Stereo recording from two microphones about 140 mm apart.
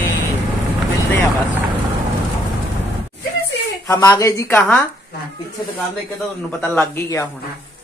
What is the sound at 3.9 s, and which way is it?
Speech, 25° left (ahead or behind).